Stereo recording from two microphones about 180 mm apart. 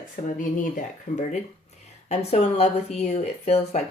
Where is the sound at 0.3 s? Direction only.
45° left (ahead or behind).